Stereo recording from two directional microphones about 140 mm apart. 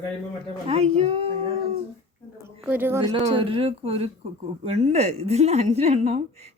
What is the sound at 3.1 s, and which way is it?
Speech, 50° right (ahead or behind).